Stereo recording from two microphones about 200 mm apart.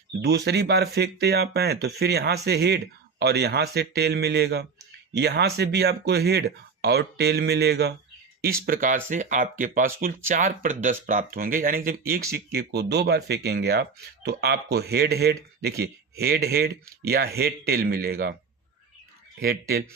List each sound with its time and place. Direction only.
0.2 s speech: 55° right (ahead or behind)
19.4 s speech: 50° right (ahead or behind)